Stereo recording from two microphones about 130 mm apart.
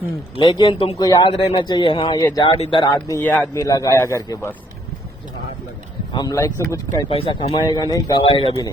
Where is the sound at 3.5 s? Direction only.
25° left (ahead or behind).